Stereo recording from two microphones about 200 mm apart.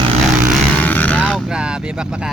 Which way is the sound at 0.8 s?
10° left (ahead or behind).